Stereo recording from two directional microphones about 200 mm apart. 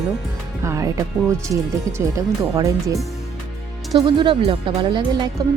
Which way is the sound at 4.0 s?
25° right (ahead or behind).